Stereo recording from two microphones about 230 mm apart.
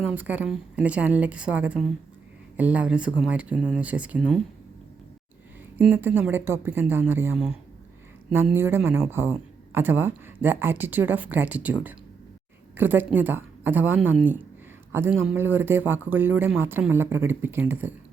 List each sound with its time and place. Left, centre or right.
0.1 s a woman's voice: centre
5.7 s a man's voice: centre